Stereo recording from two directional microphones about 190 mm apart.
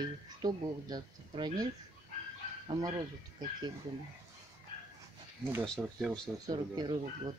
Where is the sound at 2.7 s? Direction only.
20° right (ahead or behind).